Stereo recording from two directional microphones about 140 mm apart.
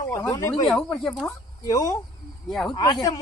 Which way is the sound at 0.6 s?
5° left (ahead or behind).